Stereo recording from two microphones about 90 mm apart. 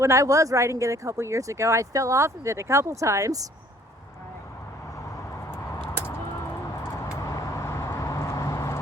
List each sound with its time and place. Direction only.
0.0 s speech: 35° right (ahead or behind)
7.0 s vehicle: 40° left (ahead or behind)